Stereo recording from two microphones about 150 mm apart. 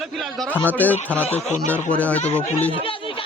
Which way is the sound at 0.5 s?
10° left (ahead or behind).